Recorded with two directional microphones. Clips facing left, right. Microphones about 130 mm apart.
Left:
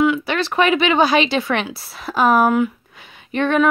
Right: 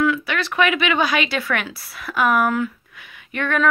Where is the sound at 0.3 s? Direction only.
30° left (ahead or behind).